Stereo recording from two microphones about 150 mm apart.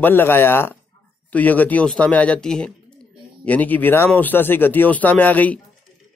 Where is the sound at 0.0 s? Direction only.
15° left (ahead or behind).